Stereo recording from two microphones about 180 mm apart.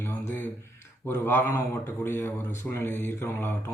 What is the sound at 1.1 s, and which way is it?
Speech, 15° left (ahead or behind).